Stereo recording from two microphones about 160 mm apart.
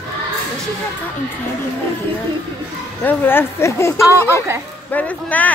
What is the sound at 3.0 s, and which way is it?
Speech, 15° left (ahead or behind).